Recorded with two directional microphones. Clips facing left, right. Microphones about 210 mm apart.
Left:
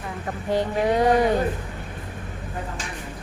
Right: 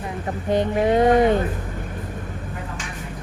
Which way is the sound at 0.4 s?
20° right (ahead or behind).